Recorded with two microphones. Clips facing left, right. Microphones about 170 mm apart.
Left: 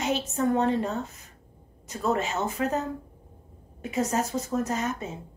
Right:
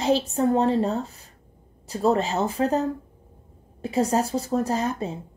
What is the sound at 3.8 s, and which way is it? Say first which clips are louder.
A woman's voice: right 4 dB; 35° right (ahead or behind).